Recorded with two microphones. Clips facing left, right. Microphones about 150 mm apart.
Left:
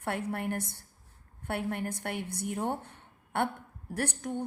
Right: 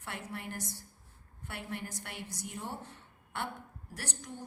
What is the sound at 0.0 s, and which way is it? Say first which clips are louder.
A woman's voice: left 9 dB; 55° left (ahead or behind).